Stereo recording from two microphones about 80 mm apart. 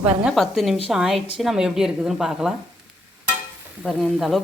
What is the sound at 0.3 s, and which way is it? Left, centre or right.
A woman's voice, centre.